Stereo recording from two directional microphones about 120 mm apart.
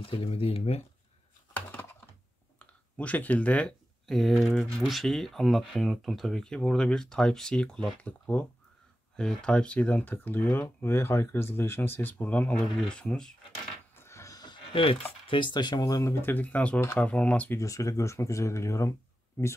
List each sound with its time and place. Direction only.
0.0 s speech: 50° left (ahead or behind)
1.5 s computer keyboard: 15° left (ahead or behind)
2.6 s speech: 10° left (ahead or behind)
13.9 s a sound: 20° left (ahead or behind); by 15.0 s 50° left (ahead or behind)
15.2 s speech: 40° left (ahead or behind); by 17.6 s 10° left (ahead or behind)
17.6 s speech: 25° left (ahead or behind)